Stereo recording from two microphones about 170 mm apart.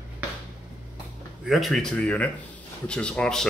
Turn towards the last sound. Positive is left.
turn(degrees=5)  # may be behind; listen again after turning